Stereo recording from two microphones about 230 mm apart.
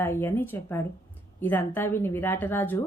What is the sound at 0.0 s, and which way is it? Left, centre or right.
A woman's voice, centre.